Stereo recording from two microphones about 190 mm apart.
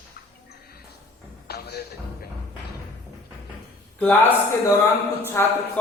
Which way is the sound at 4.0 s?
10° left (ahead or behind).